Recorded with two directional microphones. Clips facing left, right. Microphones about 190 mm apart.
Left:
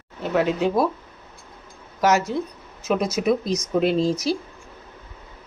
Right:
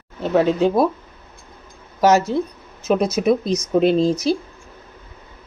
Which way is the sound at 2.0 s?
30° right (ahead or behind).